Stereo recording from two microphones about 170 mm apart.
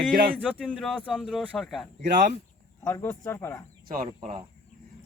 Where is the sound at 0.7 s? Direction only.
5° left (ahead or behind).